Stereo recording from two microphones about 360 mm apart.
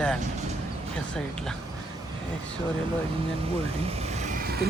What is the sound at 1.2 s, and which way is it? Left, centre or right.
Speech, centre.